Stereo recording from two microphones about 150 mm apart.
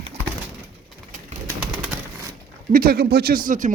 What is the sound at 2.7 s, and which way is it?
Speech, 85° right.